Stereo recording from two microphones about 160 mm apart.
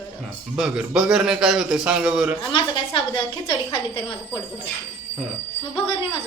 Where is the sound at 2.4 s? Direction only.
30° left (ahead or behind).